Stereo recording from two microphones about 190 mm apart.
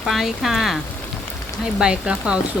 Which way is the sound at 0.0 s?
Centre (ahead or behind).